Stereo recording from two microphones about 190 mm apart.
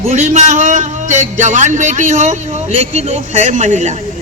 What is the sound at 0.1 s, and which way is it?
A man's voice, 35° right (ahead or behind).